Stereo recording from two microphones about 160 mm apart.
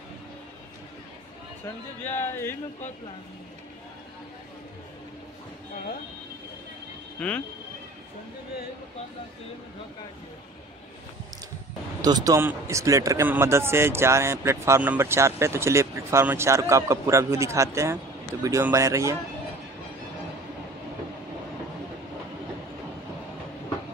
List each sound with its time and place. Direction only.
2.0 s speech: 15° left (ahead or behind)
7.2 s speech: 10° left (ahead or behind)
12.0 s speech: 25° right (ahead or behind)